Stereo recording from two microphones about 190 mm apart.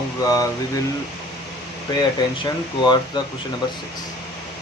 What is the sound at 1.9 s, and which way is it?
Speech, 20° left (ahead or behind).